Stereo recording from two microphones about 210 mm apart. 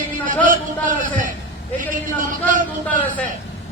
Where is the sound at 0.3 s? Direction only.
40° right (ahead or behind).